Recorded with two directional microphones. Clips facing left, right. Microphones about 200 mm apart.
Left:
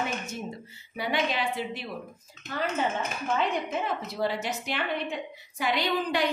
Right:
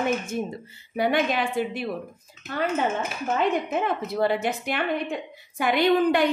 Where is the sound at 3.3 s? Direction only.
55° right (ahead or behind).